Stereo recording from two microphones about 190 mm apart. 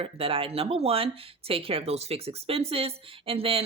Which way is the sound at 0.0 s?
30° right (ahead or behind).